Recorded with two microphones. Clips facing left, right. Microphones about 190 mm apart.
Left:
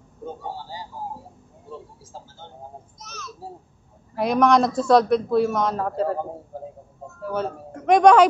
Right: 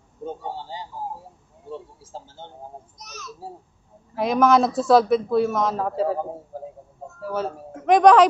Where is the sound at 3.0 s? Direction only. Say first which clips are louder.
Left 1 dB; 15° right (ahead or behind).